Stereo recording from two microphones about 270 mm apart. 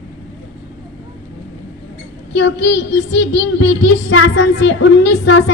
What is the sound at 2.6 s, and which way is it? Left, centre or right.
Music, left.